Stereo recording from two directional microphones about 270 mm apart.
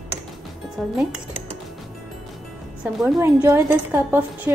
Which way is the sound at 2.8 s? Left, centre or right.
Centre.